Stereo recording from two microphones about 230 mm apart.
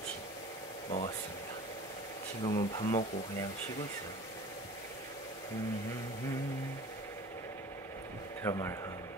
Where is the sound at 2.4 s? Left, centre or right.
Left.